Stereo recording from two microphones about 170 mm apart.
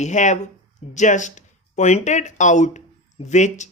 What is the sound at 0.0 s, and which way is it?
Speech, 45° left (ahead or behind).